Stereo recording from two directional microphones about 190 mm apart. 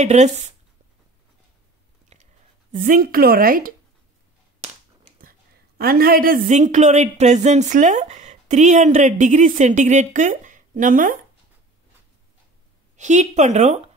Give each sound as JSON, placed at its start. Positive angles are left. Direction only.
{"t": 0.0, "sound": "speech", "side_deg": -35}
{"t": 2.1, "sound": "a sound", "side_deg": -35}
{"t": 2.7, "sound": "a woman's voice", "side_deg": -45}
{"t": 5.8, "sound": "speech", "side_deg": -50}
{"t": 12.9, "sound": "speech", "side_deg": -40}